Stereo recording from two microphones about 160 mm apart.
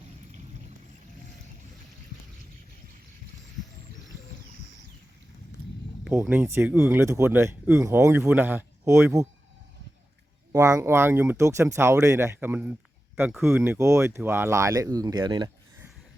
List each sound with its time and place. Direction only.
6.1 s speech: 10° right (ahead or behind)
10.5 s speech: 20° right (ahead or behind)